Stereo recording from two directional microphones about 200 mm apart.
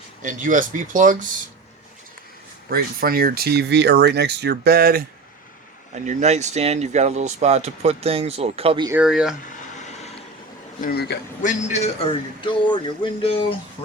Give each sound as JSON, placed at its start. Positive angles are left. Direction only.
{"t": 0.2, "sound": "speech", "side_deg": -40}
{"t": 2.6, "sound": "speech", "side_deg": -50}
{"t": 5.9, "sound": "speech", "side_deg": -35}
{"t": 8.9, "sound": "speech", "side_deg": -5}
{"t": 9.5, "sound": "a sound", "side_deg": 35}
{"t": 10.8, "sound": "a man's voice", "side_deg": 50}
{"t": 11.4, "sound": "a man's voice", "side_deg": 35}
{"t": 12.4, "sound": "a sound", "side_deg": 25}